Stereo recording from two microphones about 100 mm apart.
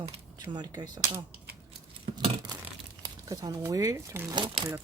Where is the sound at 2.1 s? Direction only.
90° right.